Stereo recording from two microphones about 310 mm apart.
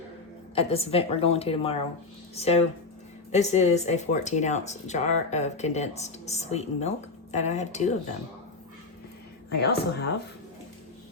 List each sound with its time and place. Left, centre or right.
0.5 s speech: centre
9.5 s a woman's voice: left